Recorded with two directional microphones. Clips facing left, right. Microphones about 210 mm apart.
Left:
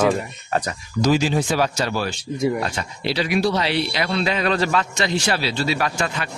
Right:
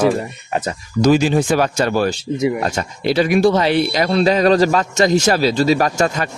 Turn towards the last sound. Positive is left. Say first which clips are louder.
# right 7 dB
turn(degrees=-45)  # may be behind; listen again after turning